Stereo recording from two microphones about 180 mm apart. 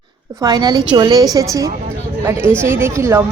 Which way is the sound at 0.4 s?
20° right (ahead or behind).